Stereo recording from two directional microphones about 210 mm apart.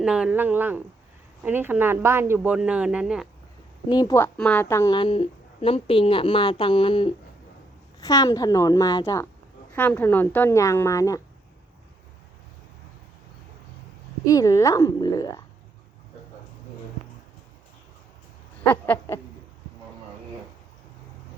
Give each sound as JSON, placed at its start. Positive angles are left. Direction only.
{"t": 0.0, "sound": "speech", "side_deg": -5}
{"t": 3.8, "sound": "a woman's voice", "side_deg": 20}
{"t": 14.3, "sound": "a woman's voice", "side_deg": 15}
{"t": 18.6, "sound": "a woman's voice", "side_deg": 10}